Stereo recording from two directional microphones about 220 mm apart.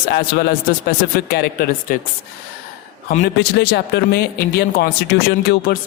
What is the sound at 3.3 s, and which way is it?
A man's voice, 50° left (ahead or behind).